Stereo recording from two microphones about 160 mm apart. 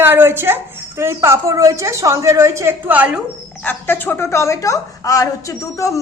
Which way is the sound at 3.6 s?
10° left (ahead or behind).